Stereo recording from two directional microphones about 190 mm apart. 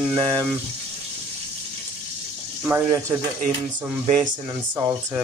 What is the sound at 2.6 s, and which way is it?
Speech, 5° right (ahead or behind).